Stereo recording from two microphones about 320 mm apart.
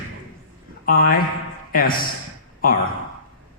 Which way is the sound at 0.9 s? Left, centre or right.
Left.